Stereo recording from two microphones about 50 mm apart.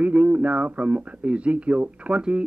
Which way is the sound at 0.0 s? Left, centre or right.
Right.